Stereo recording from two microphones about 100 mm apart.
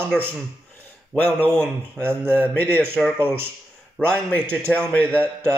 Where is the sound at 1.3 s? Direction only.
15° left (ahead or behind).